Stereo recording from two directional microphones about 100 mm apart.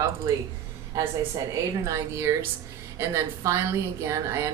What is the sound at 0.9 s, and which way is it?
A woman's voice, 35° right (ahead or behind).